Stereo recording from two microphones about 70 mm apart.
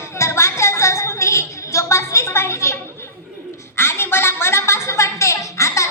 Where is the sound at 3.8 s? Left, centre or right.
Left.